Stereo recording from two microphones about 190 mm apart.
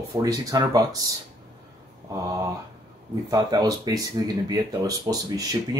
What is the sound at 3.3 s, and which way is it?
Speech, 20° right (ahead or behind).